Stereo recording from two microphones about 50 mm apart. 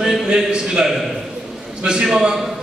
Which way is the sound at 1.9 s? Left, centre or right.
Centre.